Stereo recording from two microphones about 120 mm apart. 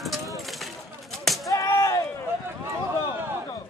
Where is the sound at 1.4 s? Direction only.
25° left (ahead or behind).